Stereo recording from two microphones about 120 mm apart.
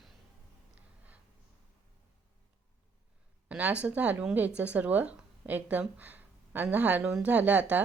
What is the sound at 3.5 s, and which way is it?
Speech, 10° right (ahead or behind).